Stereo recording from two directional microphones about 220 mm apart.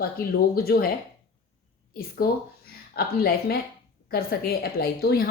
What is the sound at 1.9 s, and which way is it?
A woman's voice, 45° left (ahead or behind).